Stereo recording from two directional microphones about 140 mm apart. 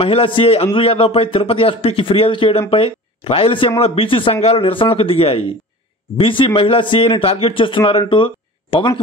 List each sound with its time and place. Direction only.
0.0 s a man's voice: 40° left (ahead or behind)